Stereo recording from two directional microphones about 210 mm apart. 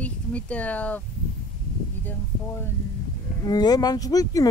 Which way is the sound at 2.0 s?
10° left (ahead or behind).